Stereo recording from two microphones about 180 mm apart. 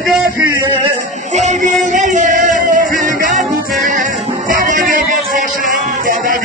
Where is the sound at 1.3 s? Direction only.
40° right (ahead or behind).